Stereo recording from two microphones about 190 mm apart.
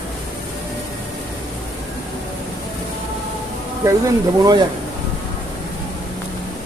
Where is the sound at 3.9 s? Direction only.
15° right (ahead or behind).